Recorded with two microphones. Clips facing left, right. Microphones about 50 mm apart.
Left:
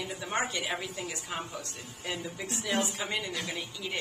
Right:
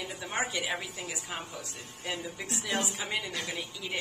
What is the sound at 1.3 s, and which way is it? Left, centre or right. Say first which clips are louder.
A woman's voice: left 2 dB; centre.